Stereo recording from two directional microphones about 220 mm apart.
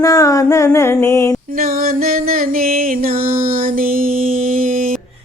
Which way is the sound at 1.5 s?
40° right (ahead or behind).